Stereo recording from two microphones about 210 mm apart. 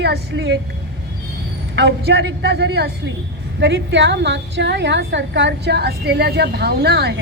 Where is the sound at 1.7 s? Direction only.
55° right (ahead or behind).